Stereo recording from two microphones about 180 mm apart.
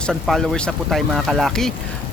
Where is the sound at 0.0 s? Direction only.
Centre (ahead or behind).